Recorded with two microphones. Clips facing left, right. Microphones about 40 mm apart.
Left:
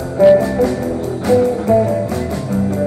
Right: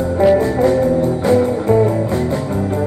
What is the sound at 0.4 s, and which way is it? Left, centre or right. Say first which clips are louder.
Music: right 2 dB; right.